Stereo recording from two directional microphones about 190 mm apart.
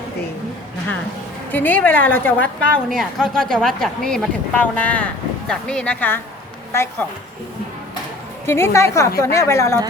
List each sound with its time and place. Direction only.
1.5 s a woman's voice: 10° left (ahead or behind)
8.4 s a woman's voice: 15° left (ahead or behind)